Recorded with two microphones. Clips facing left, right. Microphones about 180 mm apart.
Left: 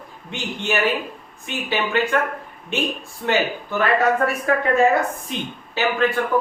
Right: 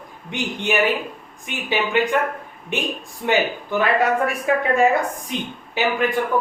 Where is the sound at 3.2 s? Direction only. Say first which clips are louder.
Right 1 dB; 15° right (ahead or behind).